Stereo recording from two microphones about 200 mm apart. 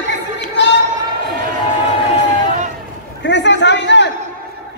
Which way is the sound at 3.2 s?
60° left (ahead or behind).